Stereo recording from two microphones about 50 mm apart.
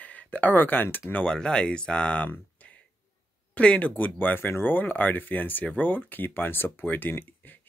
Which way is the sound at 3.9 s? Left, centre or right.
Left.